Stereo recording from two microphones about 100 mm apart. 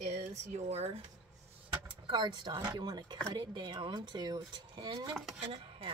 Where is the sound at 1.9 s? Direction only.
50° right (ahead or behind).